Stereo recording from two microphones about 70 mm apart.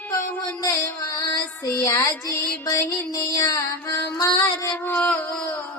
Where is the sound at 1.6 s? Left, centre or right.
Left.